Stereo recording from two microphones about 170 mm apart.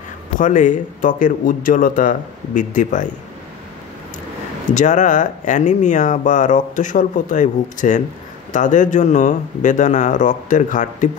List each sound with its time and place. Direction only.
0.4 s speech: 50° left (ahead or behind)
4.6 s speech: 45° left (ahead or behind)